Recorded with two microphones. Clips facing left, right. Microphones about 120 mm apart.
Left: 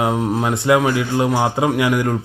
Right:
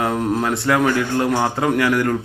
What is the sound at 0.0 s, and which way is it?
Speech, 10° left (ahead or behind).